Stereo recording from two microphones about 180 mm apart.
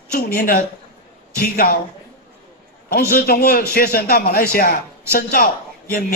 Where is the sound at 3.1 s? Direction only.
60° left (ahead or behind).